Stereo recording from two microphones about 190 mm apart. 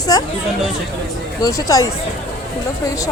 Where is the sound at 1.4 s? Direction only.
15° left (ahead or behind).